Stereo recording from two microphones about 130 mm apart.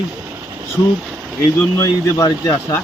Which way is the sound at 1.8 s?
25° left (ahead or behind).